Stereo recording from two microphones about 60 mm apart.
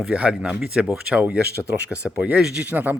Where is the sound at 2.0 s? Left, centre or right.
Centre.